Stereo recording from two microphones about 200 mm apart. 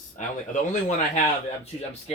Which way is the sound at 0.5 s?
40° left (ahead or behind).